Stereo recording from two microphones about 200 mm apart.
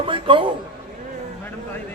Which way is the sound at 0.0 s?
25° right (ahead or behind).